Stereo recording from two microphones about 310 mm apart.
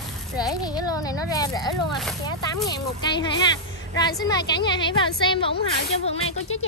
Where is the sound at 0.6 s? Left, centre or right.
Centre.